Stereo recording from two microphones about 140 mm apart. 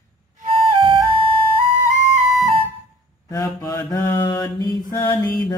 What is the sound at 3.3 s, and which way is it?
Mantra, 20° left (ahead or behind).